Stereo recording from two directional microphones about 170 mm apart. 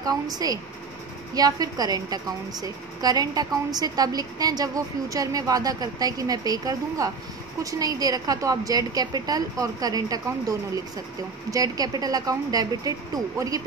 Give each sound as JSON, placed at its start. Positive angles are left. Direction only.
{"t": 0.0, "sound": "a woman's voice", "side_deg": -20}
{"t": 11.5, "sound": "a woman's voice", "side_deg": -20}